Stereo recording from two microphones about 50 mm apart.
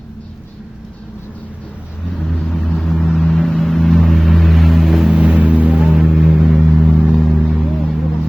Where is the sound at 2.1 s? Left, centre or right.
Centre.